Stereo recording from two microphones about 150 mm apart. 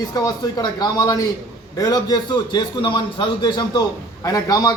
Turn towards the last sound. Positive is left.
turn(degrees=25)  # may be behind; listen again after turning